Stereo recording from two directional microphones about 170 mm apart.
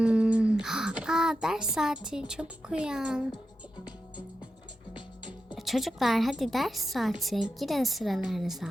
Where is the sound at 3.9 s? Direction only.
25° left (ahead or behind).